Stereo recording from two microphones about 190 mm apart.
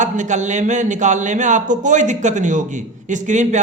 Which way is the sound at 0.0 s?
40° right (ahead or behind).